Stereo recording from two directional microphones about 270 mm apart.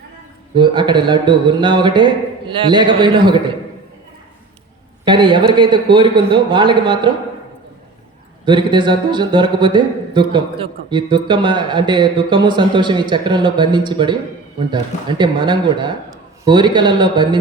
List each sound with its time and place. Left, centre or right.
0.5 s speech: centre
5.0 s speech: centre
8.4 s speech: centre
15.2 s speech: centre